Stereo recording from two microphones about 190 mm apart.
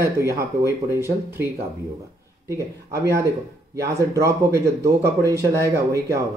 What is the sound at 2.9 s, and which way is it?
Speech, 15° right (ahead or behind).